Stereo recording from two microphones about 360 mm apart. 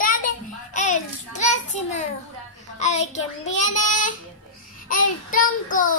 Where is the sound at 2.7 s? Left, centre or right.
Centre.